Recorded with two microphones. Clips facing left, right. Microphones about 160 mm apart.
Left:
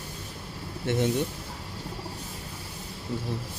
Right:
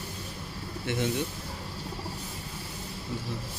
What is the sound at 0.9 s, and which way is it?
Speech, 50° left (ahead or behind).